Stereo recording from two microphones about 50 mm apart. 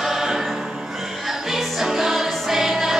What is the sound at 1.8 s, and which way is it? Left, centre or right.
Music, centre.